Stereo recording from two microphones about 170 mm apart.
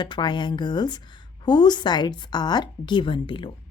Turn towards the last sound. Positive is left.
turn(degrees=30)  # may be behind; listen again after turning